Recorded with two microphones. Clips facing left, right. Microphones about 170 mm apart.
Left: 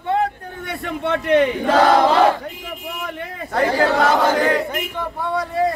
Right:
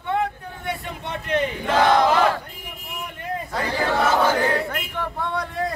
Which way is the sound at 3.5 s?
75° left (ahead or behind).